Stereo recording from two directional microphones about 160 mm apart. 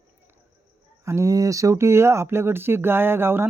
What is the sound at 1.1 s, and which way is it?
Speech, 20° right (ahead or behind).